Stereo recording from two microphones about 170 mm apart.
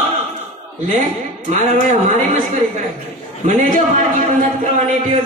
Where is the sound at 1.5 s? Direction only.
50° right (ahead or behind).